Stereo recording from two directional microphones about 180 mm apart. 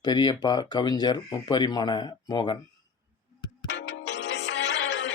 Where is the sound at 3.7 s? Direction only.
90° left.